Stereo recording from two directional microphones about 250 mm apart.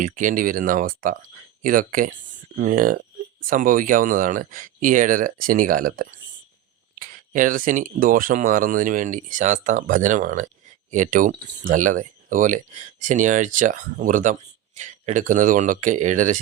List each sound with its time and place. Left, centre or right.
0.0 s speech: right